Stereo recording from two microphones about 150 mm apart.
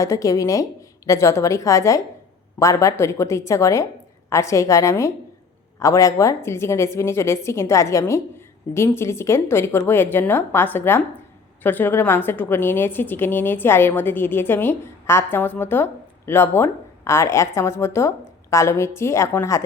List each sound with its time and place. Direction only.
0.0 s a woman's voice: 20° left (ahead or behind)